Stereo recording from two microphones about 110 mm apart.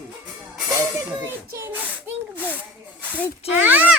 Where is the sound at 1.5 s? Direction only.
25° right (ahead or behind).